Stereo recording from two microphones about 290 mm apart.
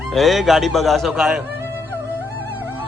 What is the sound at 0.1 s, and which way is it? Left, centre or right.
A man's voice, centre.